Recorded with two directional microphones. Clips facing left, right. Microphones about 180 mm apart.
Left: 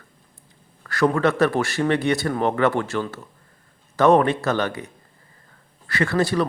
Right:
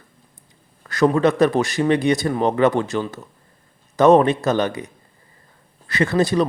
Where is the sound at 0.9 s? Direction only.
20° right (ahead or behind).